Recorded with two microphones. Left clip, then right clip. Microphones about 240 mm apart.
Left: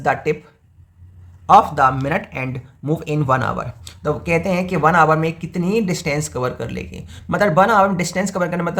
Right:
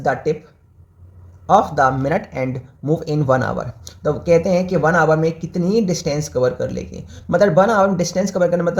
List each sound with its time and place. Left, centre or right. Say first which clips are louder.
0.0 s speech: even; left
1.5 s speech: left 2 dB; left